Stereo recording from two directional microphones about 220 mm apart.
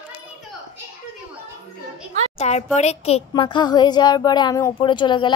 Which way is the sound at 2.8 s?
30° left (ahead or behind).